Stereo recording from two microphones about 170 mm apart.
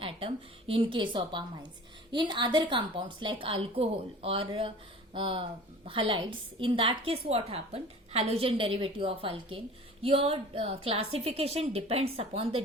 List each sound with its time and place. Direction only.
0.0 s a woman's voice: 30° right (ahead or behind)